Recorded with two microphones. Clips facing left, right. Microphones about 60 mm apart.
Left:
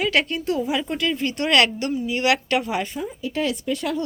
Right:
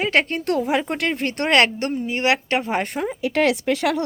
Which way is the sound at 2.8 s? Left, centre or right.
Right.